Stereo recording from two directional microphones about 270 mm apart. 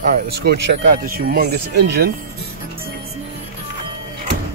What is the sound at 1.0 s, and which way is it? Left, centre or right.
Speech, right.